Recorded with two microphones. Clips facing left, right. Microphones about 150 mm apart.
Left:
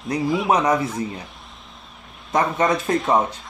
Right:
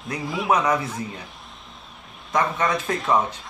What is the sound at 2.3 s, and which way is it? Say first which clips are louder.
Speech: left 3 dB; 30° left (ahead or behind).